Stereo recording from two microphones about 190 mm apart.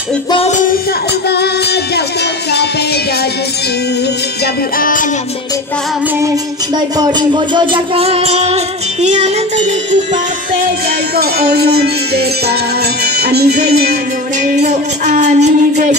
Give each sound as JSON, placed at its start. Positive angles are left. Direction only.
{"t": 0.3, "sound": "music", "side_deg": 35}
{"t": 1.3, "sound": "music", "side_deg": 60}
{"t": 4.7, "sound": "music", "side_deg": 45}
{"t": 7.0, "sound": "music", "side_deg": -25}
{"t": 11.1, "sound": "music", "side_deg": -55}
{"t": 14.4, "sound": "music", "side_deg": -40}